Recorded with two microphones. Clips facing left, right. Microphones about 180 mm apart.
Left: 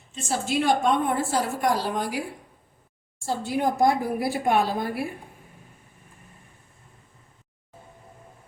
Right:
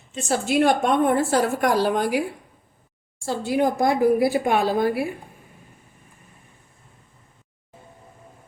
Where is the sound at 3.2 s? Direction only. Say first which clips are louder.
Right 4 dB; 85° right.